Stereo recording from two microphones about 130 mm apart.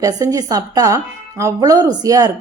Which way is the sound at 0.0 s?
25° right (ahead or behind).